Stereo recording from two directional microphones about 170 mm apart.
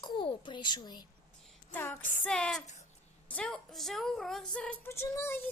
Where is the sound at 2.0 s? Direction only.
50° left (ahead or behind).